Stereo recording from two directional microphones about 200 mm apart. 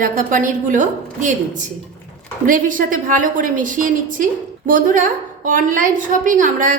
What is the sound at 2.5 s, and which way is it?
A woman's voice, 40° right (ahead or behind).